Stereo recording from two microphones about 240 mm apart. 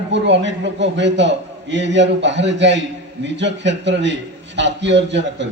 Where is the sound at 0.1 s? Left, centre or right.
Right.